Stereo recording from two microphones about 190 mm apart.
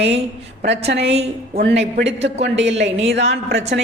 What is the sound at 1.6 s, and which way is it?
Speech, 60° right (ahead or behind).